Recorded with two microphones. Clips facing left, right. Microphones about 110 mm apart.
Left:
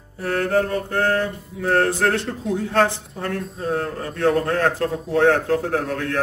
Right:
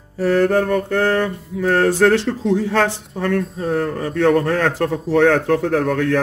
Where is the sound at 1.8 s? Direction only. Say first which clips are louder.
Right 6 dB; 90° right.